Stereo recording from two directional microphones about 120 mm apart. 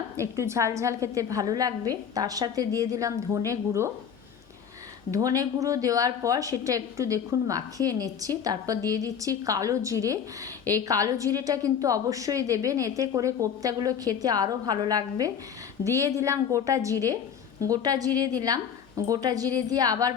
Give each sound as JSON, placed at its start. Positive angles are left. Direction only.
{"t": 0.2, "sound": "a woman's voice", "side_deg": -25}
{"t": 5.1, "sound": "a woman's voice", "side_deg": -30}